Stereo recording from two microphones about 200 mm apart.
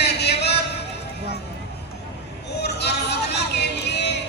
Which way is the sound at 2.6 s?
55° left (ahead or behind).